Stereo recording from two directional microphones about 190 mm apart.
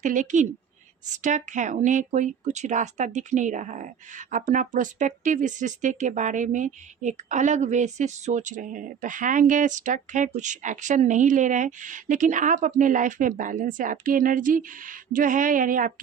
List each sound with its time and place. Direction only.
0.0 s speech: 40° right (ahead or behind)